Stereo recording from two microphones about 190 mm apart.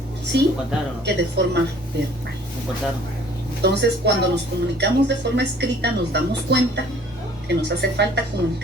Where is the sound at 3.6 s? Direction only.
65° right (ahead or behind).